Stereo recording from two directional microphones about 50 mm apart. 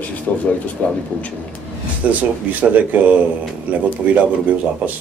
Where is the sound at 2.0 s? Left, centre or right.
Right.